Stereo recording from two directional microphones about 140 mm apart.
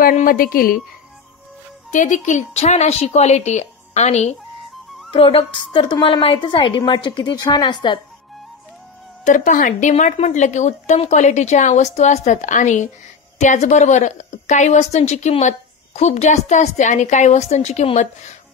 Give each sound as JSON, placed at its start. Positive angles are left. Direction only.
{"t": 0.0, "sound": "a woman's voice", "side_deg": 75}
{"t": 1.9, "sound": "a woman's voice", "side_deg": 60}
{"t": 5.1, "sound": "a woman's voice", "side_deg": 40}
{"t": 9.2, "sound": "a woman's voice", "side_deg": 65}